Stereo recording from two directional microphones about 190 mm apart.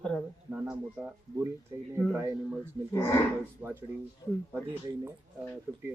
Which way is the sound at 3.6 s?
10° right (ahead or behind).